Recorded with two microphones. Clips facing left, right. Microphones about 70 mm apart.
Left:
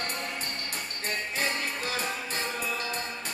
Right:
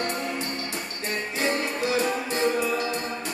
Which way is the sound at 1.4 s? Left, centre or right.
Right.